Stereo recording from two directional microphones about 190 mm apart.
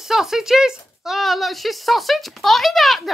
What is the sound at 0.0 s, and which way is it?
Speech, centre (ahead or behind).